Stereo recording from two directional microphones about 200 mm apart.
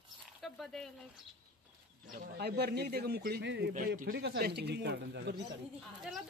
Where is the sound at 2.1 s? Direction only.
45° right (ahead or behind).